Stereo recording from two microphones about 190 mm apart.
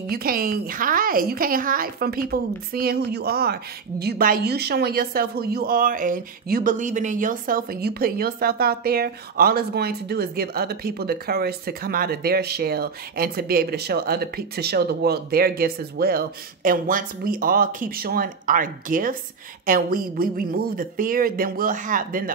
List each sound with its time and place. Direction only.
0.1 s a woman's voice: 50° right (ahead or behind)